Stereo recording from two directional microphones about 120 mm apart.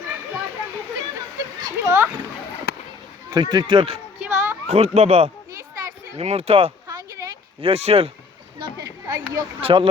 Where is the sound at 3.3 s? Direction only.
35° right (ahead or behind).